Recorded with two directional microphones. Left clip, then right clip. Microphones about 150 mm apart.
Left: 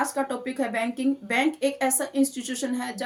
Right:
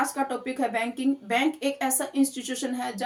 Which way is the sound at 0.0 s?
25° left (ahead or behind).